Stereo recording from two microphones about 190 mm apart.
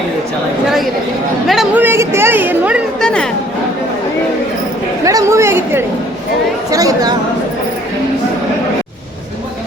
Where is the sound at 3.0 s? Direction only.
5° left (ahead or behind).